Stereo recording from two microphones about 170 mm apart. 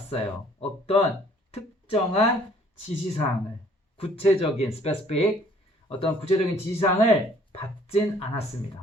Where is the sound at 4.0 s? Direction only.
35° left (ahead or behind).